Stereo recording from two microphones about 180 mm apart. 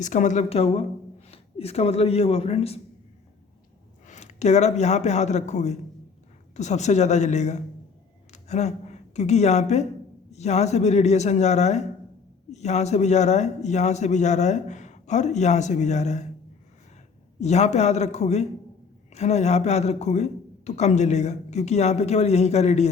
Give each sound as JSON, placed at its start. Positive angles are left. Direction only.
{"t": 0.0, "sound": "a man's voice", "side_deg": 45}
{"t": 4.0, "sound": "a woman's voice", "side_deg": 40}
{"t": 17.4, "sound": "speech", "side_deg": 40}